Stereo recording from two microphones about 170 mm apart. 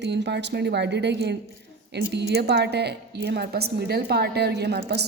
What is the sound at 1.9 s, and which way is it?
A woman's voice, 75° right (ahead or behind).